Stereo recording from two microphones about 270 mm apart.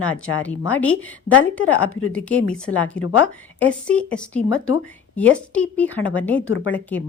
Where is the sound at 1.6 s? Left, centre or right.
Left.